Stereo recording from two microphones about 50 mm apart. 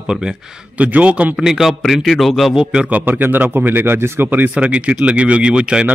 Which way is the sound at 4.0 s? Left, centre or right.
Right.